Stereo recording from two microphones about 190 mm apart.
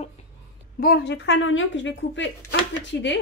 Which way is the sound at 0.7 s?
55° left (ahead or behind).